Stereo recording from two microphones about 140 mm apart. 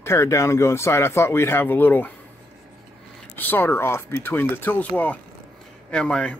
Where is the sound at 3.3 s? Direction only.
15° left (ahead or behind).